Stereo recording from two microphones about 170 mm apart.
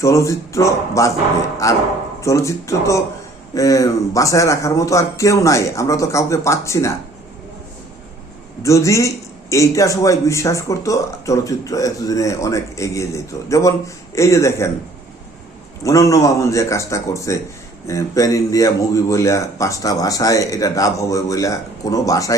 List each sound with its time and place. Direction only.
0.0 s a man's voice: 15° left (ahead or behind)
8.6 s a man's voice: 20° left (ahead or behind)
15.8 s a man's voice: 20° left (ahead or behind)